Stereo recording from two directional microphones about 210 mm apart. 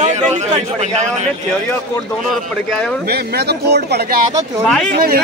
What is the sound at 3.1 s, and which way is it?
Speech, 50° right (ahead or behind).